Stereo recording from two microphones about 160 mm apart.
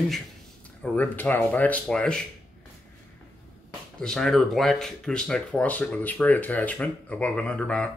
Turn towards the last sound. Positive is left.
turn(degrees=5)  # may be behind; listen again after turning